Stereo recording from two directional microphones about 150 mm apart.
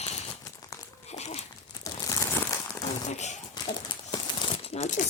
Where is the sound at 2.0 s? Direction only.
20° left (ahead or behind).